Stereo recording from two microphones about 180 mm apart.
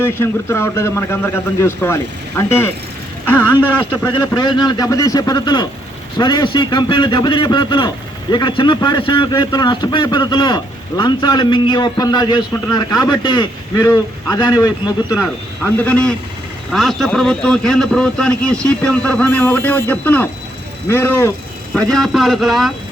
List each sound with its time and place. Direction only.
0.0 s a man's voice: 10° left (ahead or behind)
4.4 s a man's voice: 25° left (ahead or behind); by 22.7 s centre (ahead or behind)